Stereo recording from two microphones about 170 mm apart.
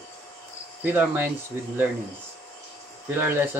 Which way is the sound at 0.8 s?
10° right (ahead or behind).